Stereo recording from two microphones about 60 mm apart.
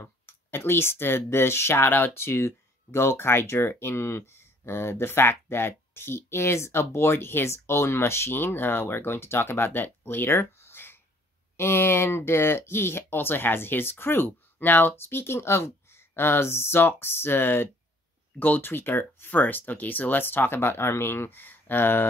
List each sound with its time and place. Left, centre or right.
0.0 s speech: left
18.7 s speech: left